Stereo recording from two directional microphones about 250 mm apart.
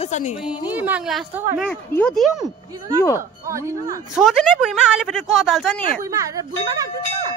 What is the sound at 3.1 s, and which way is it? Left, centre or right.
Speech, centre.